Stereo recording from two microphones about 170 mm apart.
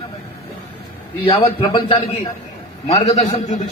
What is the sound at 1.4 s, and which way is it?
Speech, 30° left (ahead or behind).